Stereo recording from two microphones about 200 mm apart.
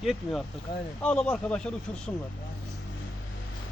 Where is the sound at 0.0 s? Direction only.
Centre (ahead or behind).